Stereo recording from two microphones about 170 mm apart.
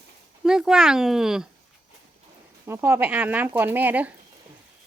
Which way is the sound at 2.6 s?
15° right (ahead or behind).